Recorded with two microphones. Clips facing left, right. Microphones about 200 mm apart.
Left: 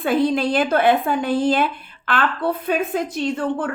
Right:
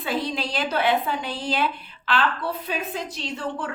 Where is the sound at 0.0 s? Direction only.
55° left (ahead or behind).